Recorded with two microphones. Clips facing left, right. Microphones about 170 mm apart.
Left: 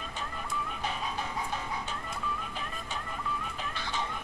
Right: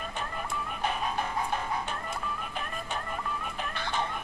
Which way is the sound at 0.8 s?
55° right (ahead or behind).